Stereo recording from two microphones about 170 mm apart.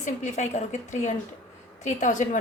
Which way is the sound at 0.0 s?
45° left (ahead or behind).